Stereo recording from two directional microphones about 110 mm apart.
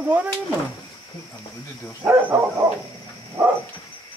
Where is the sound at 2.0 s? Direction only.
20° right (ahead or behind).